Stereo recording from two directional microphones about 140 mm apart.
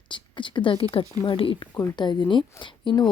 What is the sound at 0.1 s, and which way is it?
A woman's voice, 35° left (ahead or behind).